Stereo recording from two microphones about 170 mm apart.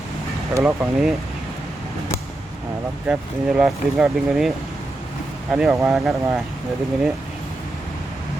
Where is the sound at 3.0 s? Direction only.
5° right (ahead or behind).